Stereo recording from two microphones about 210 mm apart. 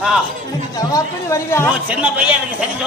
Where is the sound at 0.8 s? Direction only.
15° left (ahead or behind).